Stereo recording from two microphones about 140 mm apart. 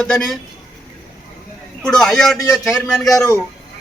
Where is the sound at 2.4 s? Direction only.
20° left (ahead or behind).